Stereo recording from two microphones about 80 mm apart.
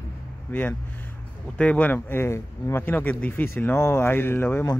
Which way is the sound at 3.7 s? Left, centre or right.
Left.